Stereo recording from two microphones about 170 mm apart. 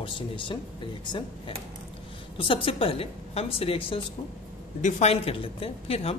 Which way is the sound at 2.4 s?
30° left (ahead or behind).